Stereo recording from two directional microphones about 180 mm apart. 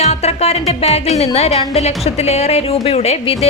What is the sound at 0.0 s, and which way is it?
Music, 35° left (ahead or behind).